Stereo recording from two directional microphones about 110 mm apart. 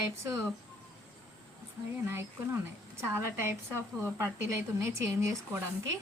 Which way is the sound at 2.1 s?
25° right (ahead or behind).